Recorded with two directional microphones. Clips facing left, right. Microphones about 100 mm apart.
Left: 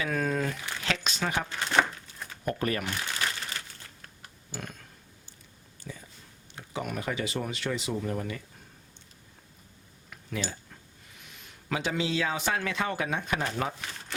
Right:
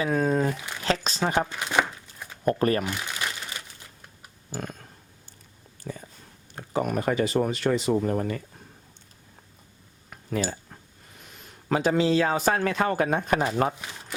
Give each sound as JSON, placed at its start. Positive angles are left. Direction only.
{"t": 0.0, "sound": "speech", "side_deg": -30}
{"t": 0.9, "sound": "a sound", "side_deg": -35}
{"t": 1.5, "sound": "a sound", "side_deg": -15}
{"t": 2.4, "sound": "speech", "side_deg": -40}
{"t": 2.8, "sound": "speech", "side_deg": -15}
{"t": 4.0, "sound": "typing", "side_deg": -15}
{"t": 4.6, "sound": "a sound", "side_deg": -40}
{"t": 6.6, "sound": "speech", "side_deg": -45}
{"t": 10.1, "sound": "cutlery", "side_deg": -40}
{"t": 11.3, "sound": "a man's voice", "side_deg": -40}